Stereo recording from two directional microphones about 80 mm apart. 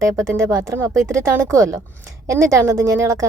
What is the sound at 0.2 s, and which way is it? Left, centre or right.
A woman's voice, right.